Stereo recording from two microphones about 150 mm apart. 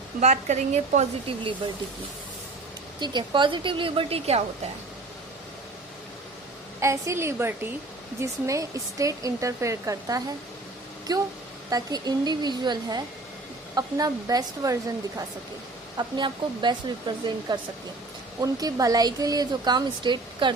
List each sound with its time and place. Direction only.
0.2 s speech: 50° right (ahead or behind)
3.0 s a woman's voice: 30° right (ahead or behind)
6.7 s a woman's voice: 20° right (ahead or behind)